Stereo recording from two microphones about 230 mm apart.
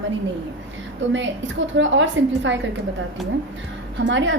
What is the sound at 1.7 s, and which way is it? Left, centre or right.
Speech, right.